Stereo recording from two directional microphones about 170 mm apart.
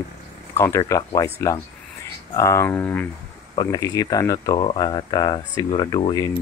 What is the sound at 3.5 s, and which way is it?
Speech, 20° left (ahead or behind).